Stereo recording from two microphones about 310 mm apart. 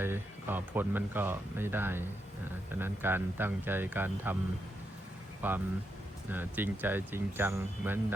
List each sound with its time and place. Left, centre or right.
0.0 s speech: centre
5.4 s speech: centre